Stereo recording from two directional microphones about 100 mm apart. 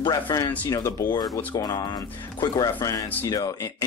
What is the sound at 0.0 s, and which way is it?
Speech, 40° left (ahead or behind).